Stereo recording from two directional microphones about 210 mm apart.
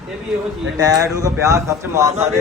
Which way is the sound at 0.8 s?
15° right (ahead or behind).